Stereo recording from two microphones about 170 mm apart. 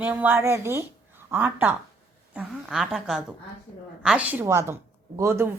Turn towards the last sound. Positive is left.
turn(degrees=-15)  # may be behind; listen again after turning